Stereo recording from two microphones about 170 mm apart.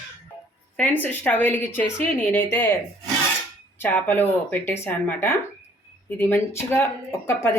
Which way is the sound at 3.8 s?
10° left (ahead or behind).